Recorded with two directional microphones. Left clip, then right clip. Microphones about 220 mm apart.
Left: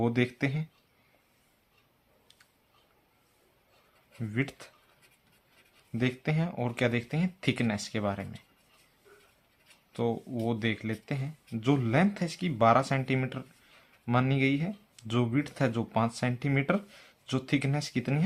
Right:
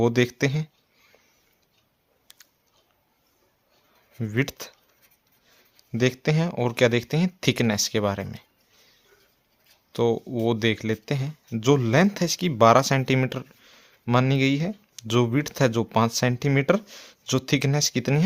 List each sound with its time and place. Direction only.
0.0 s speech: 50° right (ahead or behind)
4.2 s speech: 50° right (ahead or behind)
5.9 s speech: 50° right (ahead or behind)
9.9 s speech: 50° right (ahead or behind)